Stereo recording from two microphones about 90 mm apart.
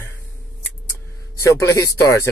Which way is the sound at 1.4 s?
35° left (ahead or behind).